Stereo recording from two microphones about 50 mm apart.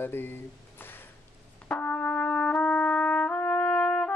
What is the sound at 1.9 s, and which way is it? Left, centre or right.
Brass instrument, left.